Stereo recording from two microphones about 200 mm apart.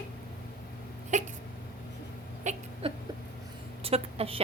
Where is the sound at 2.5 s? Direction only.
35° right (ahead or behind).